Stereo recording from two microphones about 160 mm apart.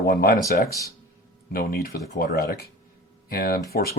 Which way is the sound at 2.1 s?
75° left (ahead or behind).